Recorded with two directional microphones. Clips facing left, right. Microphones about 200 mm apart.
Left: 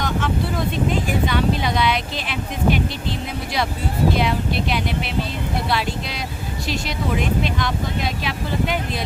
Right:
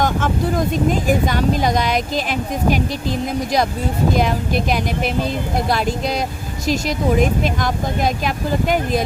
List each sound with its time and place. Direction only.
0.0 s speech: 45° right (ahead or behind)
4.1 s speech: 45° right (ahead or behind)